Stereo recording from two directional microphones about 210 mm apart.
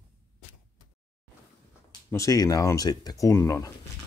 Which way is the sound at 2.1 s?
15° left (ahead or behind).